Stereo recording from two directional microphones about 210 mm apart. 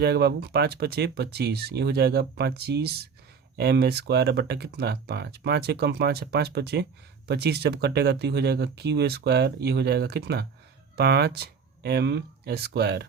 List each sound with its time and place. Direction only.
0.0 s speech: 50° right (ahead or behind)